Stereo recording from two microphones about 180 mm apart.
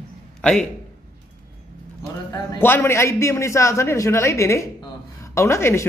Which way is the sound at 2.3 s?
15° left (ahead or behind).